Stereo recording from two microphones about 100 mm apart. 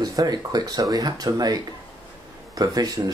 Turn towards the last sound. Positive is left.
turn(degrees=-40)  # may be behind; listen again after turning